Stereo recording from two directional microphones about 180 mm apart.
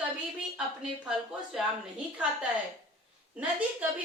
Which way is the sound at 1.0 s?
5° right (ahead or behind).